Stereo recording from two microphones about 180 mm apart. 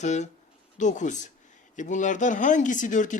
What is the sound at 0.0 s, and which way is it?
Speech, 40° left (ahead or behind).